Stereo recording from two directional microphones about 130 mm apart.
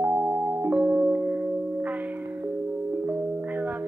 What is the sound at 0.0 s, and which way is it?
Music, 15° right (ahead or behind).